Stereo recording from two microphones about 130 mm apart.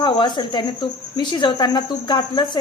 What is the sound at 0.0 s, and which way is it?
Speech, 35° left (ahead or behind).